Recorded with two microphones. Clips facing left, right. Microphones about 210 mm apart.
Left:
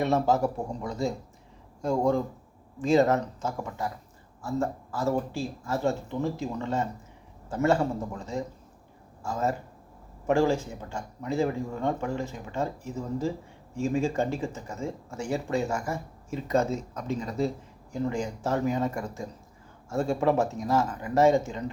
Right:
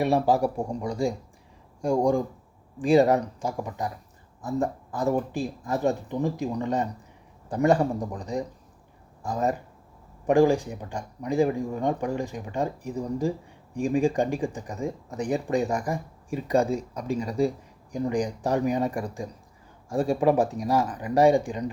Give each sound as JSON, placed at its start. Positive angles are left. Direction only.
{"t": 0.0, "sound": "speech", "side_deg": -15}